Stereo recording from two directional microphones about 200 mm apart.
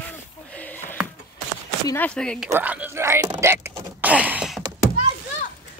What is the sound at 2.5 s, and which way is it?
Speech, 10° right (ahead or behind).